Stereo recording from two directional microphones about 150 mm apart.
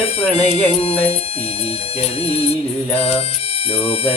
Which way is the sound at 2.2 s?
40° left (ahead or behind).